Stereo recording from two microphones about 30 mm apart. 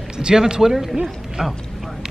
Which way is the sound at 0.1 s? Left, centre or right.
Right.